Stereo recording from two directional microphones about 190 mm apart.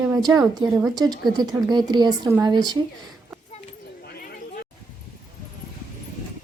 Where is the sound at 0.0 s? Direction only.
15° right (ahead or behind).